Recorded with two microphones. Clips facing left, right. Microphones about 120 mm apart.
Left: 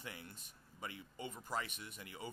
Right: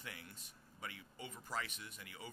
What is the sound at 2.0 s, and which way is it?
Speech, 30° left (ahead or behind).